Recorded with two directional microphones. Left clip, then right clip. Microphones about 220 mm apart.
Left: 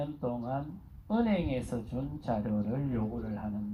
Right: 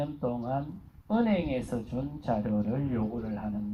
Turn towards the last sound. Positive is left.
turn(degrees=50)  # may be behind; listen again after turning